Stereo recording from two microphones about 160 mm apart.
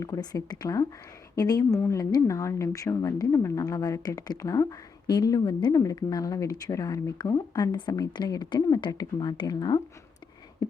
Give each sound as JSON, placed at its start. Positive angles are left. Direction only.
{"t": 0.0, "sound": "speech", "side_deg": 20}